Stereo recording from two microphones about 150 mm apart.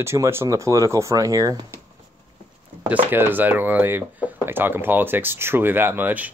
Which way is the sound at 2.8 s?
10° right (ahead or behind).